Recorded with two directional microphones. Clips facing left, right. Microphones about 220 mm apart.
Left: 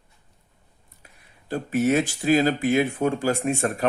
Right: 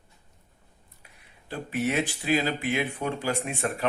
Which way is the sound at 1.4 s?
45° left (ahead or behind).